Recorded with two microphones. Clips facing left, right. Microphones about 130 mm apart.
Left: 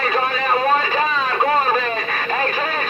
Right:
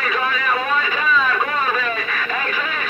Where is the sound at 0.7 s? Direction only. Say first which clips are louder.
Left 2 dB; 35° left (ahead or behind).